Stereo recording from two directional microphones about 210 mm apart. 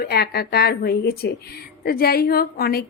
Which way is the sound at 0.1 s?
50° left (ahead or behind).